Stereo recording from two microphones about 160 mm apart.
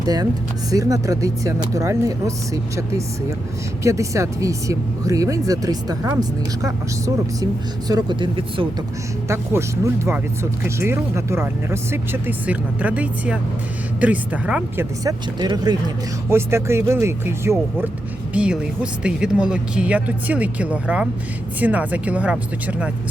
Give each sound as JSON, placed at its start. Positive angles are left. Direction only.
{"t": 0.0, "sound": "speech", "side_deg": -25}
{"t": 3.8, "sound": "speech", "side_deg": -20}
{"t": 9.3, "sound": "speech", "side_deg": -15}
{"t": 15.0, "sound": "speech", "side_deg": -25}